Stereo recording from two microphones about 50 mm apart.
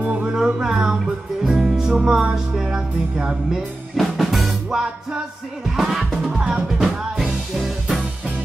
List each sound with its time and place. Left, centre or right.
0.0 s music: right
0.4 s music: centre
3.9 s music: centre
4.6 s music: centre
5.8 s music: centre
6.3 s music: centre